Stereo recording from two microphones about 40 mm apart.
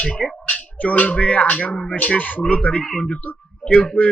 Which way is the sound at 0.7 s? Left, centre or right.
Left.